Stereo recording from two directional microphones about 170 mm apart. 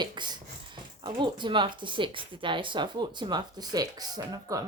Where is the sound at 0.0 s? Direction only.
25° right (ahead or behind).